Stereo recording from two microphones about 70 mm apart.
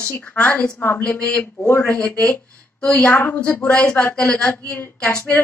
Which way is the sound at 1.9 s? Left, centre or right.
Centre.